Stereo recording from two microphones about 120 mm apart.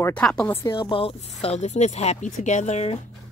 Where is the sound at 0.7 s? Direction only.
45° left (ahead or behind); by 3.0 s 65° left (ahead or behind).